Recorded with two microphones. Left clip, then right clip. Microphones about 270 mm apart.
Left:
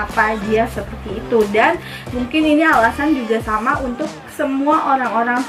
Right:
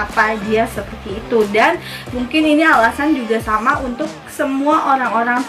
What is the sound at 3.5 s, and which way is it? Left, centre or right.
A woman's voice, centre.